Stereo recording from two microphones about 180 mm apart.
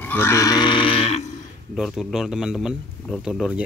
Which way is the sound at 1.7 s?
Centre (ahead or behind).